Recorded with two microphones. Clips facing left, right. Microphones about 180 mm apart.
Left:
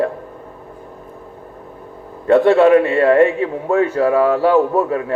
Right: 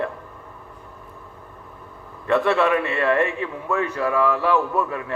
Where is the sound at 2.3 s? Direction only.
35° left (ahead or behind).